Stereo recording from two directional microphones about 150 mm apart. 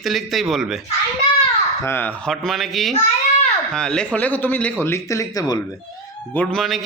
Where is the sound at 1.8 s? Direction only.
15° left (ahead or behind).